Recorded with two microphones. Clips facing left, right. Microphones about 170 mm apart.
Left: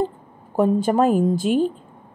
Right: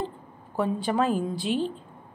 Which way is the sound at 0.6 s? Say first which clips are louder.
Left 8 dB; 45° left (ahead or behind).